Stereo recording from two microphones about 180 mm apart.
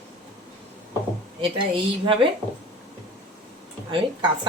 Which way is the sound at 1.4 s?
30° right (ahead or behind).